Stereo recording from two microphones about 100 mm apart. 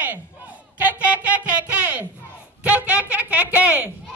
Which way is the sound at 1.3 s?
15° right (ahead or behind).